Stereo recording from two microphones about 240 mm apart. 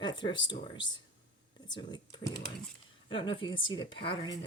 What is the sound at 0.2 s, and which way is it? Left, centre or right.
Speech, centre.